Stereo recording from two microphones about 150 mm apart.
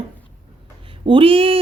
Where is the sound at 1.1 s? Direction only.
35° right (ahead or behind).